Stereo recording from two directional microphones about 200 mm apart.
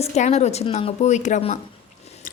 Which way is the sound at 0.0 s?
35° left (ahead or behind).